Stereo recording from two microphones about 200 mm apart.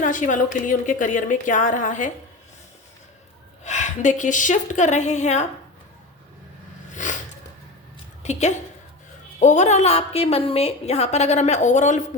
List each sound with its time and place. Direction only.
0.0 s a woman's voice: 40° left (ahead or behind)
3.6 s a woman's voice: 35° left (ahead or behind)
6.9 s a sound: 40° left (ahead or behind)
8.2 s a woman's voice: 35° left (ahead or behind)